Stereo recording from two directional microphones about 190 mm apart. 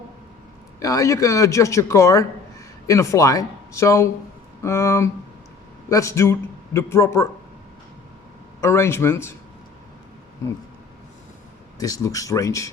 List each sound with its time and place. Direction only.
0.8 s speech: 15° left (ahead or behind)
8.6 s speech: 15° left (ahead or behind)
11.8 s speech: 20° left (ahead or behind)